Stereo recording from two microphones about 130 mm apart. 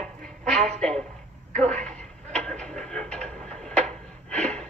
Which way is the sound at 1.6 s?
5° left (ahead or behind).